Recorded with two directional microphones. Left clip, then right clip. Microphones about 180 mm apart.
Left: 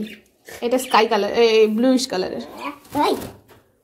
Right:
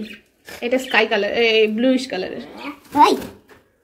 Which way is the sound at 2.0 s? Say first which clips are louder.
Left 2 dB; 25° left (ahead or behind).